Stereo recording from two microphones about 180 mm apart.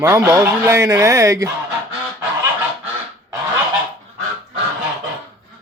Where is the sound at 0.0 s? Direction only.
10° right (ahead or behind).